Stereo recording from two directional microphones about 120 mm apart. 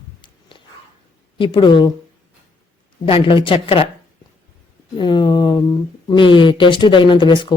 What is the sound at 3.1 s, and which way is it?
Speech, 45° left (ahead or behind).